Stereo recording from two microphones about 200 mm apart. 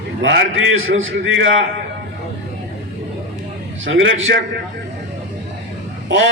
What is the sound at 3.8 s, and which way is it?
Speech, 70° right (ahead or behind).